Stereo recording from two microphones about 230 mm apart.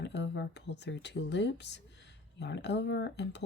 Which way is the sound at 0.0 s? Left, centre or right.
Left.